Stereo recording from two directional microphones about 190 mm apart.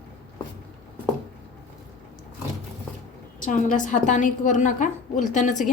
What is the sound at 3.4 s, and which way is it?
A woman's voice, 40° left (ahead or behind).